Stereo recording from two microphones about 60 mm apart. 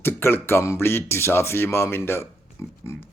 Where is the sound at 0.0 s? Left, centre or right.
Left.